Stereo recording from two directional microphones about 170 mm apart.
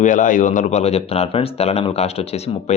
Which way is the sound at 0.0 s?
50° left (ahead or behind).